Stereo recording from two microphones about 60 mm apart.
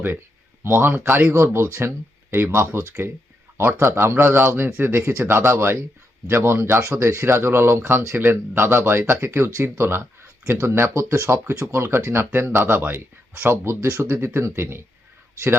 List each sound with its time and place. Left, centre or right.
0.6 s a man's voice: right
1.3 s a man's voice: right